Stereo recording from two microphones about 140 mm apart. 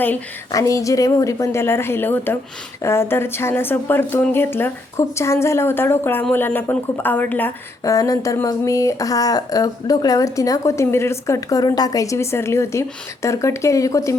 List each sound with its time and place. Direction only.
0.5 s speech: 25° left (ahead or behind)